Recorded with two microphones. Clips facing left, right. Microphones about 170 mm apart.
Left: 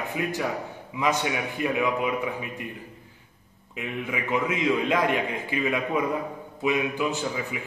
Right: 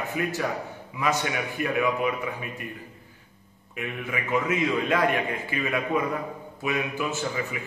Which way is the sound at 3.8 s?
15° left (ahead or behind).